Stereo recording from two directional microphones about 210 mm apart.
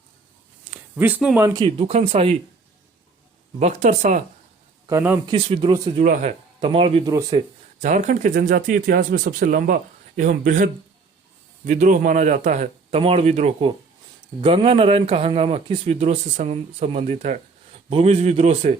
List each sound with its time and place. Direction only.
0.6 s speech: 5° right (ahead or behind)
1.6 s a man's voice: 30° right (ahead or behind)
3.6 s speech: 35° right (ahead or behind)
4.9 s speech: 10° right (ahead or behind)
5.3 s a man's voice: 25° right (ahead or behind)
6.0 s a man's voice: 35° right (ahead or behind); by 7.4 s 15° right (ahead or behind)
7.8 s a man's voice: 35° right (ahead or behind)